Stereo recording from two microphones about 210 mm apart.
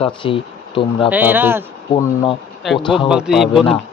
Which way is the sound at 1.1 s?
10° right (ahead or behind).